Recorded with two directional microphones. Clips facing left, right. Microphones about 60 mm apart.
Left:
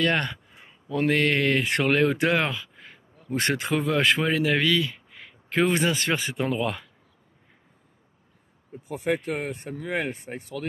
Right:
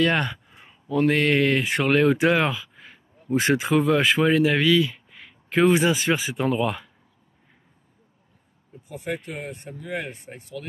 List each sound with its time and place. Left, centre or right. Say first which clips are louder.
0.0 s a sound: right 2 dB; centre
1.0 s speech: right 2 dB; centre
8.8 s speech: left 4 dB; left
9.3 s speech: left 4 dB; left